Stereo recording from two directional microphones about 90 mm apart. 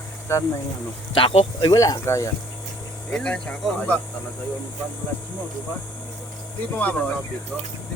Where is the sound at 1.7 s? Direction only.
40° left (ahead or behind).